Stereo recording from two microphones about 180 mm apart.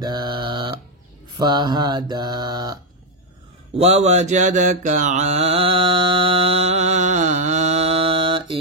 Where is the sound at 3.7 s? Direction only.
35° right (ahead or behind).